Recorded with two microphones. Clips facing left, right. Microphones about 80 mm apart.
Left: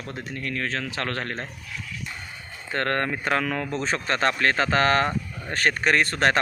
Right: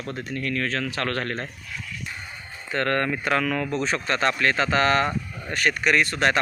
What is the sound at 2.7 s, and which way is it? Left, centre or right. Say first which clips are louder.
Speech: right 1 dB; left.